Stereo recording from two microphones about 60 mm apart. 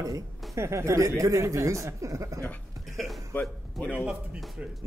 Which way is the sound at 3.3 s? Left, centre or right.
Left.